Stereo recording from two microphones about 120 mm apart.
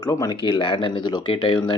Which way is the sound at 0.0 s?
30° left (ahead or behind).